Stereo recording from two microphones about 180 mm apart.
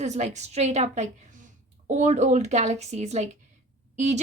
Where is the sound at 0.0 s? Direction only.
40° right (ahead or behind).